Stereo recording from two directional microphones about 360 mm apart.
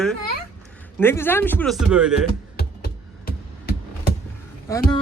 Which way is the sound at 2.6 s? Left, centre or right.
Left.